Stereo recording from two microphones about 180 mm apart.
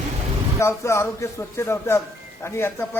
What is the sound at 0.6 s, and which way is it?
A man's voice, 15° left (ahead or behind).